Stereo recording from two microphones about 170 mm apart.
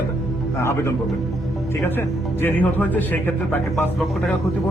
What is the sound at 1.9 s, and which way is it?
Speech, 10° left (ahead or behind).